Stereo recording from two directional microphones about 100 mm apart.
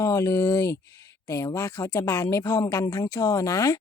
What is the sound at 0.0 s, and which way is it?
Speech, 30° left (ahead or behind).